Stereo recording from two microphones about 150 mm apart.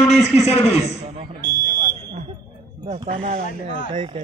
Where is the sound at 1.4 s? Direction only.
70° left (ahead or behind).